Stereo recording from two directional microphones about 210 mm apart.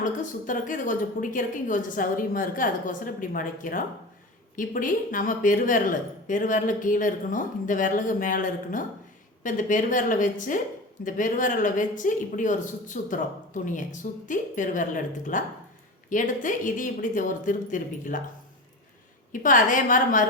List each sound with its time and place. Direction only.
0.0 s a woman's voice: 40° left (ahead or behind)
19.3 s a woman's voice: 40° left (ahead or behind)